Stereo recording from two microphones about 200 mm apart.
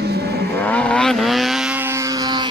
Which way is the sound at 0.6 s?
5° left (ahead or behind).